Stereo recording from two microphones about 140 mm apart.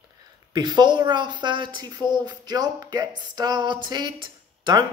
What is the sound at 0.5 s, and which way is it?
Speech, 30° right (ahead or behind).